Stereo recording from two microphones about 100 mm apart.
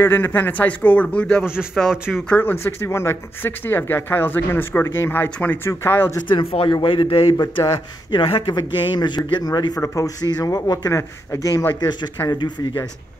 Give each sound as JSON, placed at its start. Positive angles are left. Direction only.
{"t": 0.0, "sound": "speech", "side_deg": 20}
{"t": 1.4, "sound": "a man's voice", "side_deg": -10}
{"t": 2.2, "sound": "speech", "side_deg": 15}
{"t": 2.5, "sound": "speech", "side_deg": 25}
{"t": 6.2, "sound": "a man's voice", "side_deg": 60}
{"t": 8.5, "sound": "speech", "side_deg": 50}
{"t": 11.8, "sound": "speech", "side_deg": 45}